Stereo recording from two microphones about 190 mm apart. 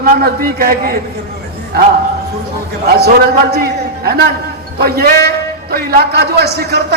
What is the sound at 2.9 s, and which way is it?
A man's voice, 55° right (ahead or behind).